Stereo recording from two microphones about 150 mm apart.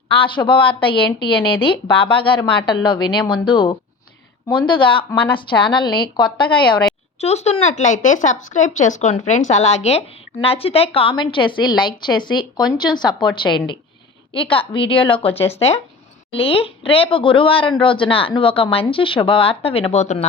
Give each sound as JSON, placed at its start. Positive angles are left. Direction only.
{"t": 0.1, "sound": "speech", "side_deg": 35}
{"t": 7.2, "sound": "speech", "side_deg": 45}